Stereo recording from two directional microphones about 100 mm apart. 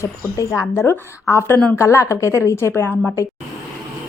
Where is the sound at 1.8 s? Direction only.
30° left (ahead or behind).